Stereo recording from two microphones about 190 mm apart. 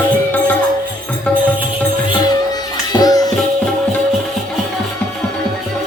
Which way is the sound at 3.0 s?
20° left (ahead or behind).